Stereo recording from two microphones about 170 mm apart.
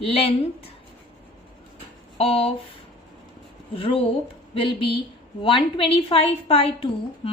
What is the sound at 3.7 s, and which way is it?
A woman's voice, 35° left (ahead or behind).